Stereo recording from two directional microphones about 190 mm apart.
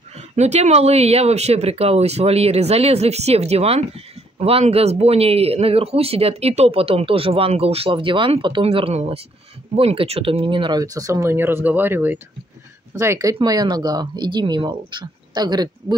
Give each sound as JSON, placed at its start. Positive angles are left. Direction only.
{"t": 0.4, "sound": "speech", "side_deg": -35}